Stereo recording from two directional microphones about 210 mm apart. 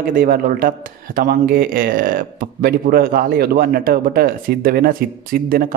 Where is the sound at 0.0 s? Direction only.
40° right (ahead or behind).